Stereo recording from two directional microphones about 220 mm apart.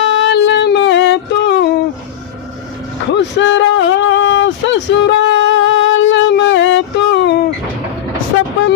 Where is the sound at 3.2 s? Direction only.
55° left (ahead or behind).